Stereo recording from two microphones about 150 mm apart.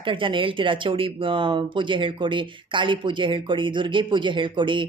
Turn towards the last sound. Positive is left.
turn(degrees=-35)  # may be behind; listen again after turning